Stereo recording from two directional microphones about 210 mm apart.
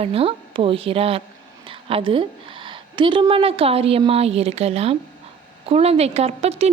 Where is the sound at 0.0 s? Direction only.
30° right (ahead or behind).